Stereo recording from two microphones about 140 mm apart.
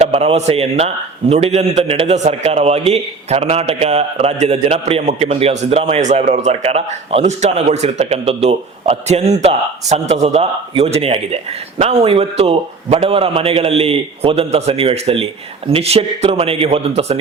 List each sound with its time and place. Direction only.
0.0 s a man's voice: 45° right (ahead or behind)